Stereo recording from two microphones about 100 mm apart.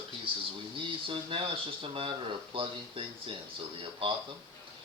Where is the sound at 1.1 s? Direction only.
60° right (ahead or behind).